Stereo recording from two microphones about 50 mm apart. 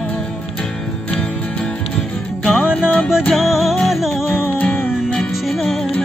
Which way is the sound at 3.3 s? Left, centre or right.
Centre.